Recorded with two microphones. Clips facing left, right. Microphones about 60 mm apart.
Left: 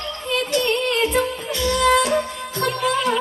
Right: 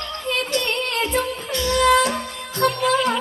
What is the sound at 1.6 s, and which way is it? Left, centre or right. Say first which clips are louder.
Music: right 1 dB; left.